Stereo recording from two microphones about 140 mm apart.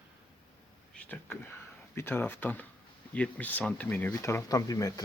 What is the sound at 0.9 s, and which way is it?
Speech, 10° left (ahead or behind).